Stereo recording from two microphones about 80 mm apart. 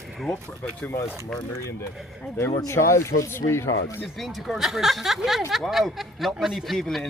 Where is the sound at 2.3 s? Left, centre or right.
Left.